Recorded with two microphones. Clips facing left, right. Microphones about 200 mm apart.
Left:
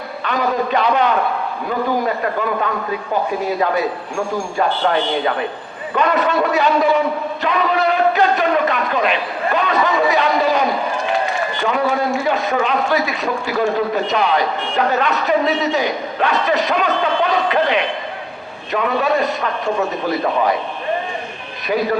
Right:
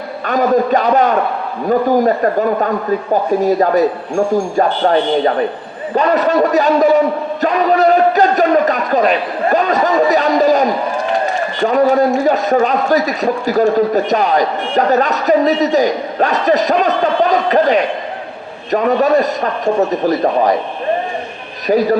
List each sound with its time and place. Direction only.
0.3 s a man's voice: 45° right (ahead or behind)
21.7 s a man's voice: 40° right (ahead or behind)